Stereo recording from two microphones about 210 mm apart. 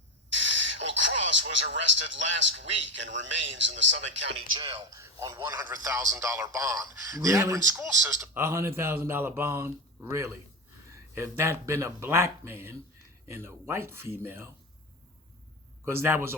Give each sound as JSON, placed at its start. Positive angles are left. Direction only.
{"t": 0.3, "sound": "speech", "side_deg": -60}
{"t": 4.4, "sound": "a man's voice", "side_deg": -20}
{"t": 15.8, "sound": "a man's voice", "side_deg": -10}